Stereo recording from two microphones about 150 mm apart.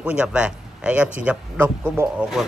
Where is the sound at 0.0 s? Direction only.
5° right (ahead or behind).